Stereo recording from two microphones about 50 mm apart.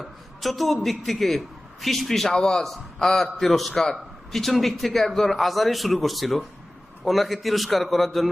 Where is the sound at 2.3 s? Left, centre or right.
Centre.